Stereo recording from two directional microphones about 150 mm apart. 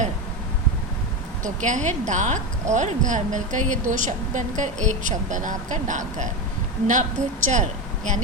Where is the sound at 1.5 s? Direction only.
55° right (ahead or behind).